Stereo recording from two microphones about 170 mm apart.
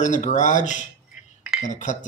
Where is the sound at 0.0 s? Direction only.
45° left (ahead or behind).